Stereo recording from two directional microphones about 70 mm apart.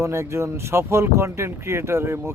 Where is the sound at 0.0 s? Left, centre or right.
Right.